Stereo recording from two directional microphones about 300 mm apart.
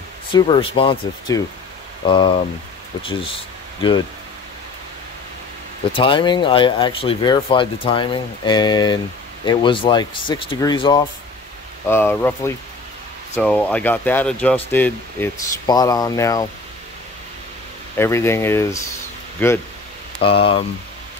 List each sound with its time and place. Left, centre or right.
0.3 s speech: centre
5.9 s speech: centre
17.9 s speech: centre
20.2 s speech: centre